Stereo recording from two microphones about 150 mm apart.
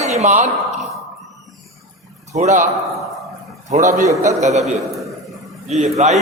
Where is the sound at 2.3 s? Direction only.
50° right (ahead or behind).